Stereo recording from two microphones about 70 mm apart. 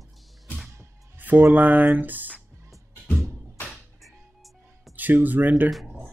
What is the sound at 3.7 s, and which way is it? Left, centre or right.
Music, centre.